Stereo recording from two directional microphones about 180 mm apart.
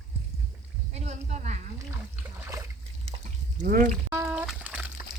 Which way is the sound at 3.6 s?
50° right (ahead or behind).